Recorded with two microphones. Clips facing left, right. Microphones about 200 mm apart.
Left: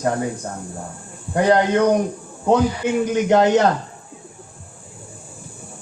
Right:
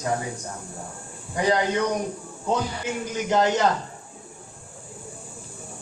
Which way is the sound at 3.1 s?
60° left (ahead or behind).